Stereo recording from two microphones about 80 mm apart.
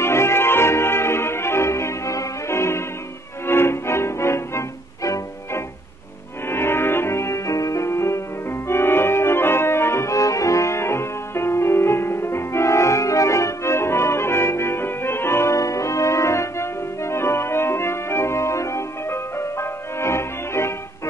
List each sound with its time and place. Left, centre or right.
0.0 s music: left